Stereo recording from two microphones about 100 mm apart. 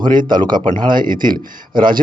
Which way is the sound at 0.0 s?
50° right (ahead or behind).